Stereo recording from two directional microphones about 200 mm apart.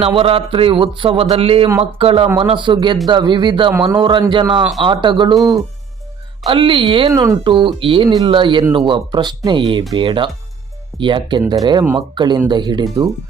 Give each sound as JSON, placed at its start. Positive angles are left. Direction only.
{"t": 0.0, "sound": "speech", "side_deg": -30}
{"t": 3.7, "sound": "a man's voice", "side_deg": -5}
{"t": 3.9, "sound": "speech", "side_deg": -20}
{"t": 6.5, "sound": "speech", "side_deg": -25}